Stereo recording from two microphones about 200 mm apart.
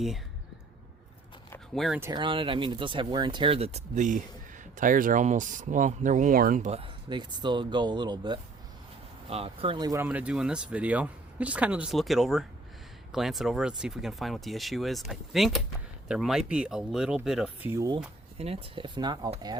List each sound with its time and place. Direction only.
1.5 s a sound: 5° left (ahead or behind)
2.0 s speech: 20° right (ahead or behind)
17.7 s speech: 15° right (ahead or behind)
18.3 s speech: 30° right (ahead or behind)